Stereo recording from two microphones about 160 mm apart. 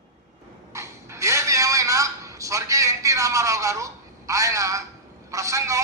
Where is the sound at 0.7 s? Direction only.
20° right (ahead or behind).